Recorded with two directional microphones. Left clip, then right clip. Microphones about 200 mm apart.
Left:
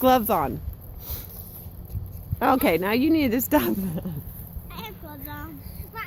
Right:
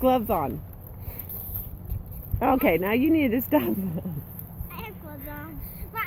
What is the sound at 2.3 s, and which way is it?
Speech, 15° left (ahead or behind).